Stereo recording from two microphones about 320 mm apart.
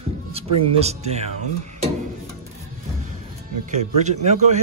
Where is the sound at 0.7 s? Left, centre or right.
Centre.